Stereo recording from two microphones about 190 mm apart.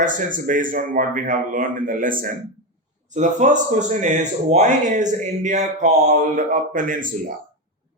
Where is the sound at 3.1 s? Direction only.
40° right (ahead or behind).